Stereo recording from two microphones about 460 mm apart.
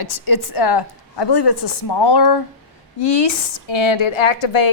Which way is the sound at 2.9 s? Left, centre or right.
Left.